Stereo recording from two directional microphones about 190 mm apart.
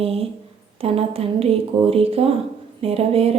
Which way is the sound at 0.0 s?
30° right (ahead or behind).